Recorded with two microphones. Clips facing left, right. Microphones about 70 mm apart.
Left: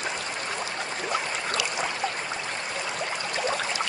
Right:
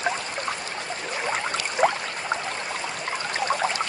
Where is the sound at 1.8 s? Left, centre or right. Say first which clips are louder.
Right 10 dB; right.